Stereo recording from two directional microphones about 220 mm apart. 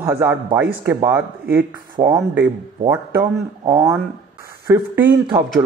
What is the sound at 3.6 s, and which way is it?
Speech, 15° right (ahead or behind).